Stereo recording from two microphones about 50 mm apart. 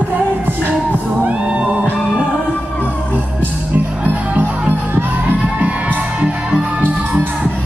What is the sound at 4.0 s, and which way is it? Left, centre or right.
Music, right.